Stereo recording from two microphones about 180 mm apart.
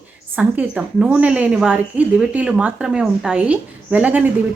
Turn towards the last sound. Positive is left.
turn(degrees=-5)  # may be behind; listen again after turning